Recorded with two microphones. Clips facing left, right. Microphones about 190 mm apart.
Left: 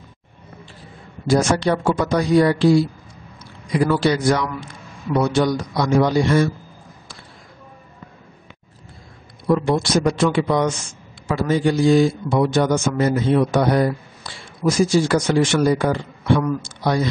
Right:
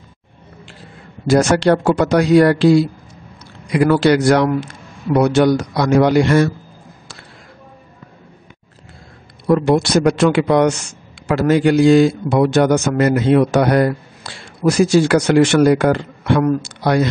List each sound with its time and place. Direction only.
1.2 s a man's voice: 75° right (ahead or behind)
9.5 s a man's voice: 70° right (ahead or behind)